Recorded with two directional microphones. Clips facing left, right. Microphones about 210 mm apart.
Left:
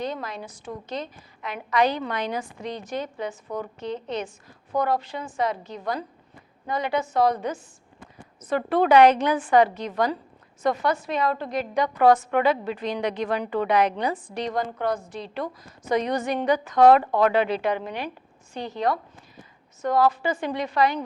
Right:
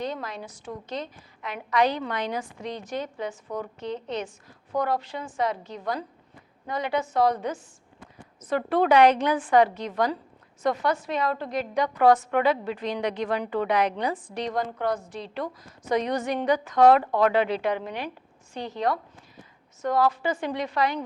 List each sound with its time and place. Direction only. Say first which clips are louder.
0.0 s a woman's voice: left 1 dB; 10° left (ahead or behind)
6.7 s a woman's voice: left 2 dB; 10° left (ahead or behind)
20.0 s a woman's voice: left 2 dB; 10° left (ahead or behind)